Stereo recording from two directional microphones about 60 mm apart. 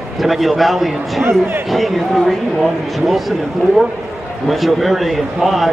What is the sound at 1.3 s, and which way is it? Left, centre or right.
Speech, right.